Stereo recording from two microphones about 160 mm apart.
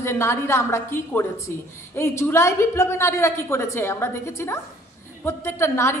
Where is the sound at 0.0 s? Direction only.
15° left (ahead or behind).